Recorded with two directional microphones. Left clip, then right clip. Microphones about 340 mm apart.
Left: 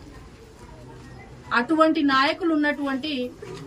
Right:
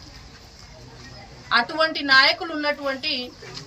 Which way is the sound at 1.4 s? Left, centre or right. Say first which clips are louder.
Left 1 dB; centre.